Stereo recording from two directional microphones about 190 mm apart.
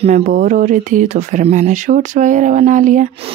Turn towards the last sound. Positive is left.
turn(degrees=-40)  # may be behind; listen again after turning